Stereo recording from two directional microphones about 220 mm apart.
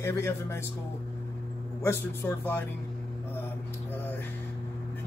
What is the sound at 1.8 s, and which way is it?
Speech, 10° left (ahead or behind).